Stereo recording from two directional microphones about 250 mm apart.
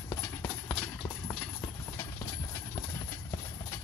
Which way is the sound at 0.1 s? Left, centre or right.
Centre.